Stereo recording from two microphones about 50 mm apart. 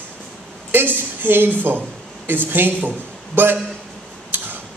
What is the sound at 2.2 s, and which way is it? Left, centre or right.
A woman's voice, right.